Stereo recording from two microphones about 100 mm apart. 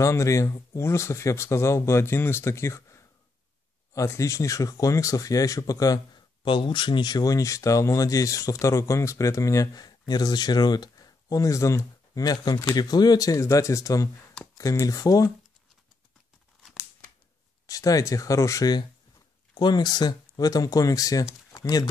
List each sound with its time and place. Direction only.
0.0 s speech: 30° left (ahead or behind)
6.4 s speech: 50° left (ahead or behind); by 15.3 s 35° left (ahead or behind)
17.6 s speech: 35° left (ahead or behind)
21.5 s a sound: 40° left (ahead or behind)